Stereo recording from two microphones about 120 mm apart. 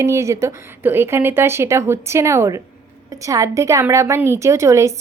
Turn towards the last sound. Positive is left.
turn(degrees=-25)  # may be behind; listen again after turning